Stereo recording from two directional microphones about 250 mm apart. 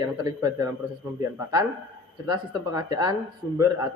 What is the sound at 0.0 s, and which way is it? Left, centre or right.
Speech, centre.